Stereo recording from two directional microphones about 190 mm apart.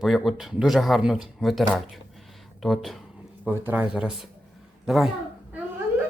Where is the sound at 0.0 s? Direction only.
Centre (ahead or behind).